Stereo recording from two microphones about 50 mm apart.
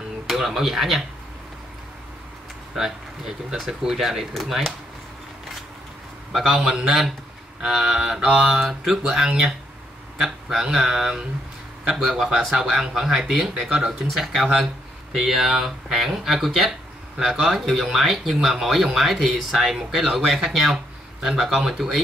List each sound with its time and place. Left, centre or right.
0.3 s speech: centre
2.7 s speech: centre
6.3 s speech: centre
8.5 s speech: centre
10.6 s speech: centre
14.1 s speech: centre